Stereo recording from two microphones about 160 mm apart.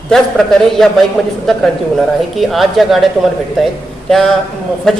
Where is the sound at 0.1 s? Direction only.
Centre (ahead or behind).